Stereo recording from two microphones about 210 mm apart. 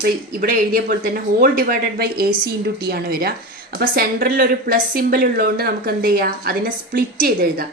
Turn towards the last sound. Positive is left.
turn(degrees=-45)  # may be behind; listen again after turning